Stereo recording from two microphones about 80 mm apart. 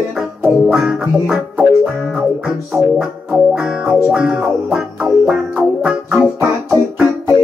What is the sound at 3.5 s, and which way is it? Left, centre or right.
Music, centre.